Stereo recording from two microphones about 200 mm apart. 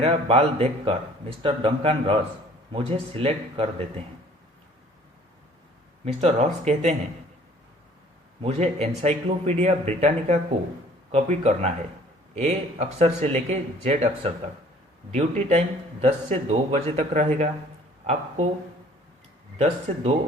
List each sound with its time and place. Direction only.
0.0 s speech: 30° right (ahead or behind)
6.1 s speech: 30° right (ahead or behind)
8.4 s speech: 30° right (ahead or behind)
19.5 s speech: 30° right (ahead or behind)